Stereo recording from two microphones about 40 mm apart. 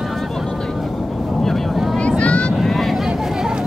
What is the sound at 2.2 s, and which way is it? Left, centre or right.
Vehicle, left.